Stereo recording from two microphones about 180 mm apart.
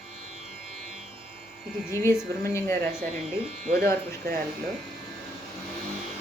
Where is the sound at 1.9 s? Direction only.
15° left (ahead or behind).